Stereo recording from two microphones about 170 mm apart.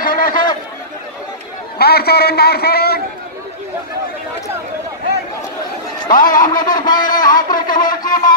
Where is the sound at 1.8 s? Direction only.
65° left (ahead or behind).